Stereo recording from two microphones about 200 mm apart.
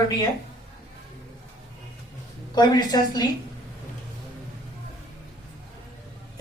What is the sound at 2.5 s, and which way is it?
Speech, 20° left (ahead or behind).